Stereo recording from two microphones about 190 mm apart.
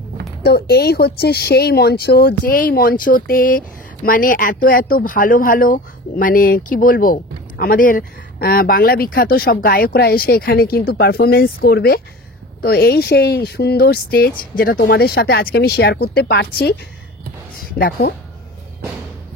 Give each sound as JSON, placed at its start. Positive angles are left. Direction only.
{"t": 0.4, "sound": "speech", "side_deg": 55}